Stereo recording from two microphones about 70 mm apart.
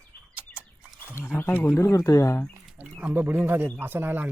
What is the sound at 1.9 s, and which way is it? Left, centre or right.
Speech, left.